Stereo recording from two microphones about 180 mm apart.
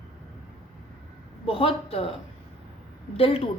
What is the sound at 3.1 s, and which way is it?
Speech, 30° left (ahead or behind).